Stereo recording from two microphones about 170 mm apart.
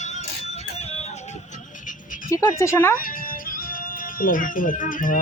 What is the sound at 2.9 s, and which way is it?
Music, 55° left (ahead or behind).